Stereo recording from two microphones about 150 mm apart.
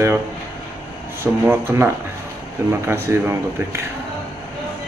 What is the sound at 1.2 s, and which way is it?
Speech, 15° right (ahead or behind).